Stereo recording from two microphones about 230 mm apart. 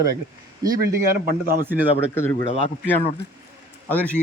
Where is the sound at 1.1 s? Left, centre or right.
Right.